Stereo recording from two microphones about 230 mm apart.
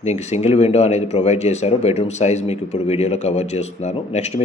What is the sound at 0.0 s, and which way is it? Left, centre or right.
Speech, left.